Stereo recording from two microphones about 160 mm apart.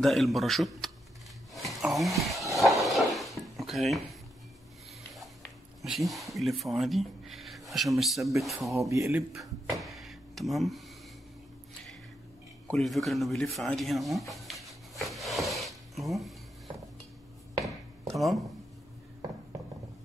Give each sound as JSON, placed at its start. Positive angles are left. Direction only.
{"t": 0.0, "sound": "a man's voice", "side_deg": 0}
{"t": 1.5, "sound": "a sound", "side_deg": 0}
{"t": 2.5, "sound": "drawer open or close", "side_deg": 0}
{"t": 5.1, "sound": "a sound", "side_deg": 0}
{"t": 8.4, "sound": "a man's voice", "side_deg": 0}
{"t": 8.7, "sound": "speech", "side_deg": -20}
{"t": 9.3, "sound": "speech", "side_deg": 0}
{"t": 12.6, "sound": "a sound", "side_deg": 0}
{"t": 18.0, "sound": "speech", "side_deg": 0}